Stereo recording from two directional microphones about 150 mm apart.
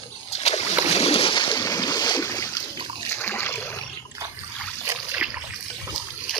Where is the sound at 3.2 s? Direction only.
15° left (ahead or behind).